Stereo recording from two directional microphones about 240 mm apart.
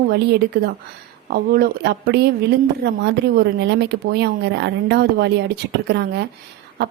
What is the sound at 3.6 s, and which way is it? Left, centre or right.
A woman's voice, right.